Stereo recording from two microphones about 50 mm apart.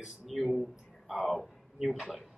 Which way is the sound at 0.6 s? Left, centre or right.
Centre.